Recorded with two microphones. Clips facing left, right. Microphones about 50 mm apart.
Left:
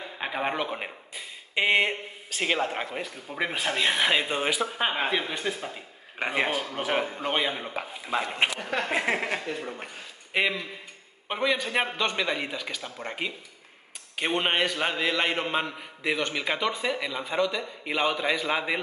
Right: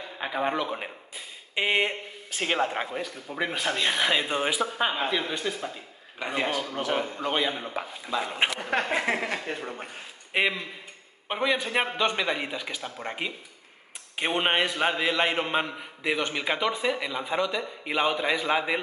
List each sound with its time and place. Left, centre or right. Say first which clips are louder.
0.2 s speech: right 1 dB; centre
1.1 s speech: left 3 dB; centre
2.9 s speech: right 1 dB; centre
4.6 s speech: even; centre
8.5 s speech: right 2 dB; right
8.8 s speech: even; centre
10.3 s a man's voice: even; centre